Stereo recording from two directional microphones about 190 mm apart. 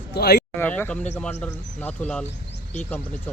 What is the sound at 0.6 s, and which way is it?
Speech, 10° left (ahead or behind).